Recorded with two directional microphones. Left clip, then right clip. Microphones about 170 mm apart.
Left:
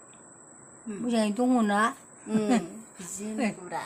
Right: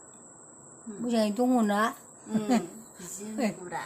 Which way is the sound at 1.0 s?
Centre (ahead or behind).